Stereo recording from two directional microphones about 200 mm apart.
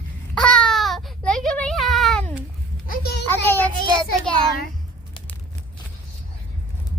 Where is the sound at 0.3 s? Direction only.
5° left (ahead or behind).